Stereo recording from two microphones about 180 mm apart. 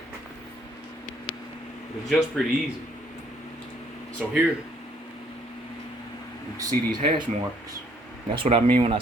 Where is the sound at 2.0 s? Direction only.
Centre (ahead or behind).